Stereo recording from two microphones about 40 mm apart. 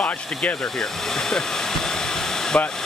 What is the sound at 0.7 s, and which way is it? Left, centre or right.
Hair dryer, centre.